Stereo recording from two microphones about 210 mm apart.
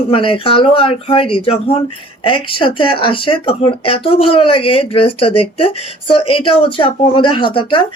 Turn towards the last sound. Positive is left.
turn(degrees=25)  # may be behind; listen again after turning